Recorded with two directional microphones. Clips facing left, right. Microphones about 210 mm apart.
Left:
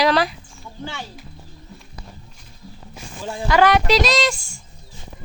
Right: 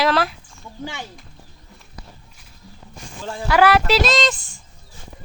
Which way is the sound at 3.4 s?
5° right (ahead or behind).